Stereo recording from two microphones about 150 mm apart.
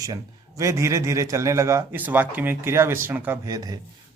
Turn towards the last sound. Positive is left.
turn(degrees=-25)  # may be behind; listen again after turning